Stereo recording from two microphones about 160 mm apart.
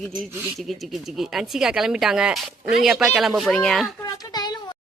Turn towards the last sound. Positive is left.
turn(degrees=25)  # may be behind; listen again after turning